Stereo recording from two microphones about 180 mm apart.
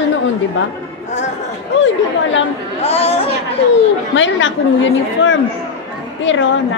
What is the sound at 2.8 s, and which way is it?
Speech, 35° left (ahead or behind).